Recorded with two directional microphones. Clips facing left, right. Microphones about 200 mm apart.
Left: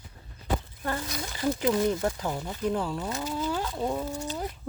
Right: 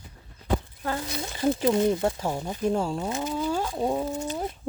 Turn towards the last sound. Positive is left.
turn(degrees=-15)  # may be behind; listen again after turning